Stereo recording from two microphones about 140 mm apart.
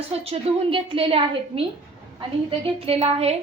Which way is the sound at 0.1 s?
40° right (ahead or behind).